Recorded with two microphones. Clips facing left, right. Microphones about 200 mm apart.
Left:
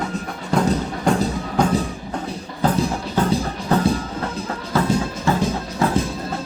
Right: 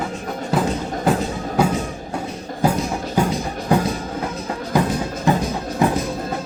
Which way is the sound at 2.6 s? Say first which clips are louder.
Right 1 dB; 10° right (ahead or behind).